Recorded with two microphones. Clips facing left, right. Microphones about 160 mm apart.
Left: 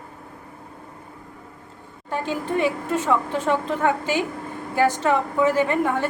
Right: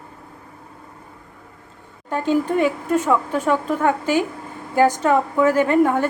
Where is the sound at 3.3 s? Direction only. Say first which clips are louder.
Right 3 dB; 15° left (ahead or behind).